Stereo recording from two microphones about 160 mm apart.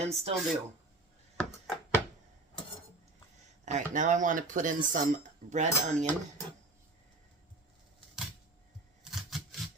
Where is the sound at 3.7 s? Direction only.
50° right (ahead or behind).